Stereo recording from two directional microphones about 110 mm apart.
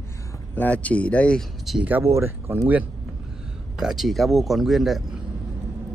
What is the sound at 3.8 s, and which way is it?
Speech, 5° right (ahead or behind).